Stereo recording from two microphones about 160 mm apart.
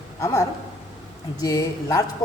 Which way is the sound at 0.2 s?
20° left (ahead or behind).